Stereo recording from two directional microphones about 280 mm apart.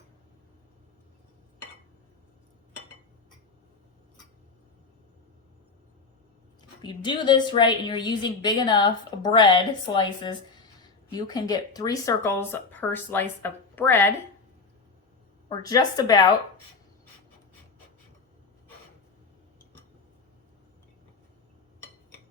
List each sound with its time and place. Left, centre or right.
6.6 s speech: centre
15.4 s speech: centre